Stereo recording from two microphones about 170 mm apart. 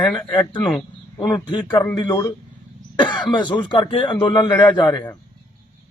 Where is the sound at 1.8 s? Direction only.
15° left (ahead or behind).